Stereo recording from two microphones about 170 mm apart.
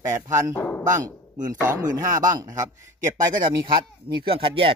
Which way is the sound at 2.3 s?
20° right (ahead or behind).